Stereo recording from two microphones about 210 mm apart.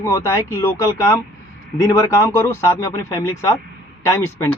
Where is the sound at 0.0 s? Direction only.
15° left (ahead or behind).